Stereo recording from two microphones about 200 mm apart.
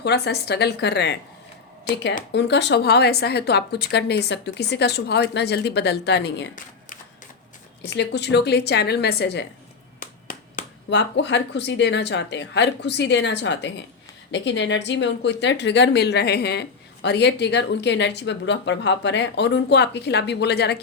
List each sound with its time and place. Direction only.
0.0 s a woman's voice: 55° left (ahead or behind)
2.3 s a woman's voice: 60° left (ahead or behind)
7.9 s a woman's voice: 60° left (ahead or behind)
10.0 s a sound: 45° left (ahead or behind)
10.8 s a woman's voice: 60° left (ahead or behind)